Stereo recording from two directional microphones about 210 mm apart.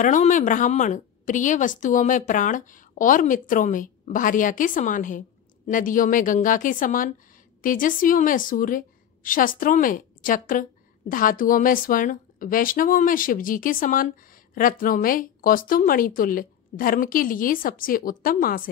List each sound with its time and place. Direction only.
0.0 s a woman's voice: 35° left (ahead or behind)